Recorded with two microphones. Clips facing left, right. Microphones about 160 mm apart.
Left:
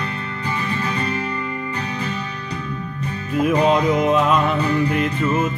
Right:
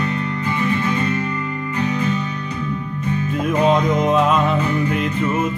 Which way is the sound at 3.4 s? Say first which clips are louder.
Left 1 dB; 5° left (ahead or behind).